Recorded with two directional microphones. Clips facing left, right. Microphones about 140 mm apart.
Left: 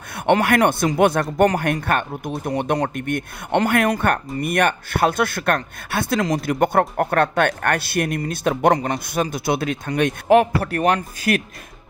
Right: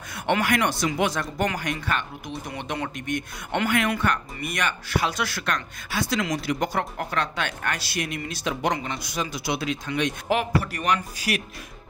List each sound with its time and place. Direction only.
0.1 s speech: 55° left (ahead or behind)